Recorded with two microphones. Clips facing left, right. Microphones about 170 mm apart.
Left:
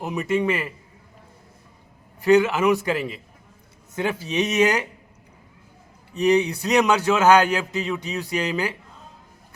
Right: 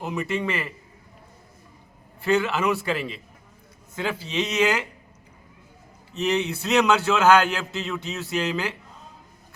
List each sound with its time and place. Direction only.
0.1 s a man's voice: 20° left (ahead or behind)
2.2 s a man's voice: 15° left (ahead or behind)
6.1 s a man's voice: 15° left (ahead or behind)